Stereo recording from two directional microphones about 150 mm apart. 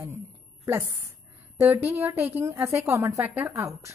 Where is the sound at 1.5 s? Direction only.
15° right (ahead or behind).